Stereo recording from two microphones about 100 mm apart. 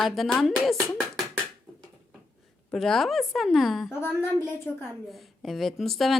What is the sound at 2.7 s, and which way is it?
A woman's voice, 5° left (ahead or behind).